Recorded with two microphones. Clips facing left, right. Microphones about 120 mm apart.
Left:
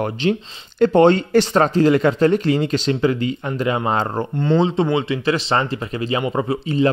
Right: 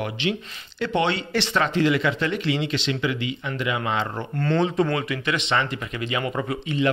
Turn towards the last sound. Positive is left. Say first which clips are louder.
# left 5 dB
turn(degrees=35)  # may be behind; listen again after turning